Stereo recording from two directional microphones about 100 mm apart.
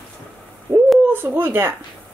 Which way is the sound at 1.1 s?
20° right (ahead or behind).